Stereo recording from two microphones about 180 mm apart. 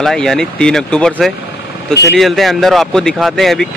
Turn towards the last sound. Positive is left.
turn(degrees=0)  # may be behind; listen again after turning